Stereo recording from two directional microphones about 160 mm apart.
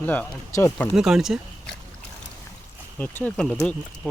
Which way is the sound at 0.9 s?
5° right (ahead or behind).